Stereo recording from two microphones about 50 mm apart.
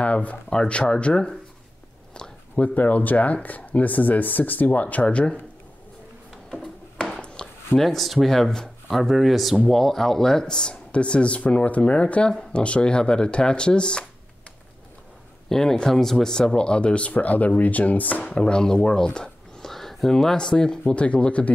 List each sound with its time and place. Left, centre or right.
0.0 s speech: left
2.1 s a sound: centre
2.6 s speech: left
7.0 s a sound: left
7.8 s speech: centre
8.9 s speech: centre
15.5 s speech: centre; by 18.2 s left
18.3 s speech: centre
19.7 s speech: centre
20.8 s speech: left